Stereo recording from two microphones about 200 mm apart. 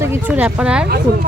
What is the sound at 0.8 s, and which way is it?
Speech, 50° right (ahead or behind).